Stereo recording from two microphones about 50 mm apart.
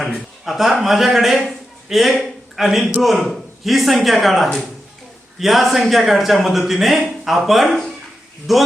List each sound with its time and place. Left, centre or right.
0.0 s a man's voice: centre